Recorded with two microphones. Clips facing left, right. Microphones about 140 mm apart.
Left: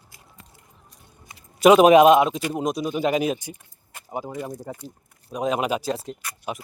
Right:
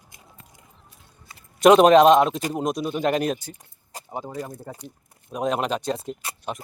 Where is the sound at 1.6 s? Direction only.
5° left (ahead or behind).